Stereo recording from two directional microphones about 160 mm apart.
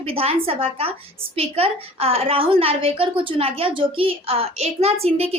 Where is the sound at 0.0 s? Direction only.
35° right (ahead or behind).